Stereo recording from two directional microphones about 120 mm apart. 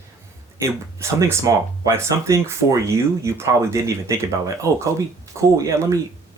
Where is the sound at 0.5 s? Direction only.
25° right (ahead or behind).